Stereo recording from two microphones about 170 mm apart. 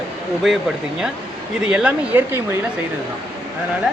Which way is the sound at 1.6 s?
5° right (ahead or behind).